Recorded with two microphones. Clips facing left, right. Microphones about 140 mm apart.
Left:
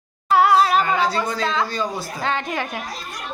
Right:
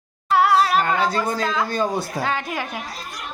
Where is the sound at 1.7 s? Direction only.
50° right (ahead or behind).